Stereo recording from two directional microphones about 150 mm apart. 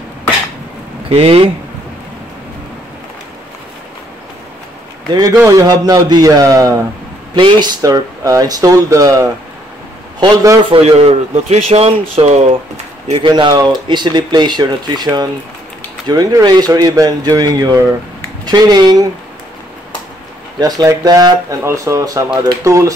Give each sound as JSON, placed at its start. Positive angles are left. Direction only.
{"t": 1.0, "sound": "speech", "side_deg": -40}
{"t": 5.1, "sound": "speech", "side_deg": -25}
{"t": 10.7, "sound": "speech", "side_deg": -40}
{"t": 13.1, "sound": "speech", "side_deg": -30}
{"t": 20.5, "sound": "speech", "side_deg": -25}